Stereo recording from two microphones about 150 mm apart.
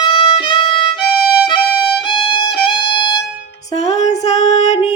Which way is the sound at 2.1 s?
35° left (ahead or behind).